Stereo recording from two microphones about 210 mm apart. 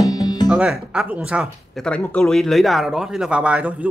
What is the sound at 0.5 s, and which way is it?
Speech, 5° right (ahead or behind).